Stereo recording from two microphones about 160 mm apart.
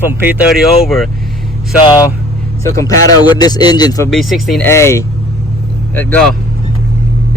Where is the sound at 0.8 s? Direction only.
Centre (ahead or behind).